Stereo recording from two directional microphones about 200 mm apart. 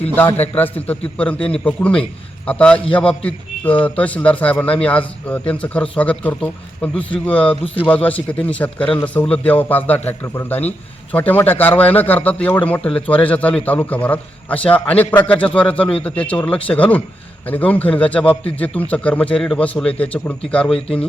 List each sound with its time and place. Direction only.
0.5 s a man's voice: 10° left (ahead or behind)
7.3 s speech: 25° left (ahead or behind)
7.8 s a man's voice: 5° left (ahead or behind)
20.7 s speech: 30° left (ahead or behind)